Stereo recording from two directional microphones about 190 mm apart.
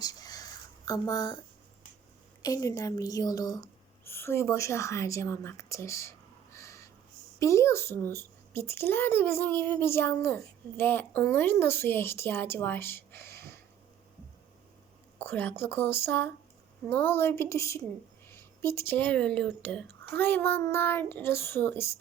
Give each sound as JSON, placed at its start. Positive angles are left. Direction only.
{"t": 0.0, "sound": "a sound", "side_deg": 20}
{"t": 2.4, "sound": "a child's voice", "side_deg": 15}
{"t": 15.2, "sound": "a child's voice", "side_deg": 10}